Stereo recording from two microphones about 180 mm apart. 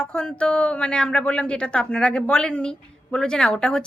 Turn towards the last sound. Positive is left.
turn(degrees=5)  # may be behind; listen again after turning